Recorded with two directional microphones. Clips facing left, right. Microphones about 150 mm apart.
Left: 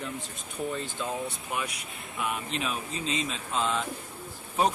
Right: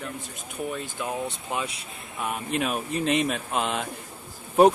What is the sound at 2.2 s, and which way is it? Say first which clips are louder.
Speech: right 4 dB; 50° right (ahead or behind).